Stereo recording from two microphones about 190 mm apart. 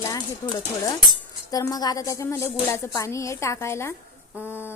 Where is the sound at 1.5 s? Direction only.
20° left (ahead or behind).